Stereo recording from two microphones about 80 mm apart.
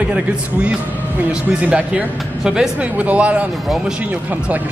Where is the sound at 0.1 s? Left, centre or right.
Centre.